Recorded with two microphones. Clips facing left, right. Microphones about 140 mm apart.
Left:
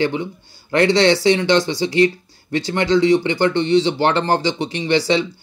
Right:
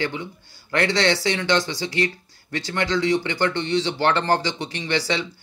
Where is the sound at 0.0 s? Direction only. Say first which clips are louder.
Left 7 dB; 25° left (ahead or behind).